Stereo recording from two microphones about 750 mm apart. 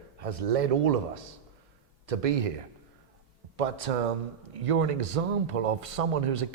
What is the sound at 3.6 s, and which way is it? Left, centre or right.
Speech, right.